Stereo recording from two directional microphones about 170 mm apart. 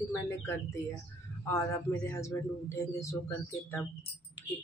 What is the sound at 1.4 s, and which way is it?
Speech, 15° left (ahead or behind).